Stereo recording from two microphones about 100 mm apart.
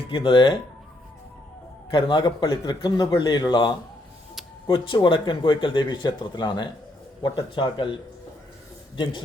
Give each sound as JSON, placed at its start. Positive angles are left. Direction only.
{"t": 0.1, "sound": "speech", "side_deg": 55}
{"t": 1.9, "sound": "speech", "side_deg": 55}